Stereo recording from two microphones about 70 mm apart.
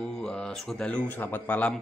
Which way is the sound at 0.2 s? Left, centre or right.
Centre.